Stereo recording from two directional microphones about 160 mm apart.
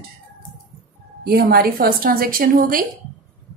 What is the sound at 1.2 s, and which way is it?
A woman's voice, 75° right (ahead or behind).